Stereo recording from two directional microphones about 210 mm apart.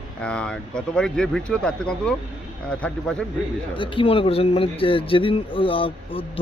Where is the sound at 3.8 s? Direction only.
25° left (ahead or behind).